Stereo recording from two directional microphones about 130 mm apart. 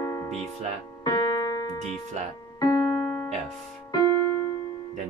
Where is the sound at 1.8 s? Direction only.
60° right (ahead or behind).